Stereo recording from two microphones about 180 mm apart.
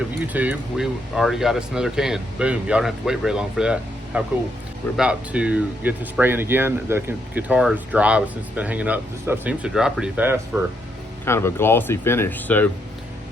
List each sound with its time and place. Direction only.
0.3 s speech: 5° right (ahead or behind)
11.3 s speech: 15° left (ahead or behind)